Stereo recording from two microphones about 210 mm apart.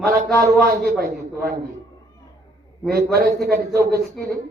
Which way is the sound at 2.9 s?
45° right (ahead or behind).